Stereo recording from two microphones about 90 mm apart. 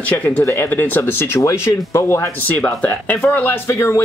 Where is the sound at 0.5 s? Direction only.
25° left (ahead or behind).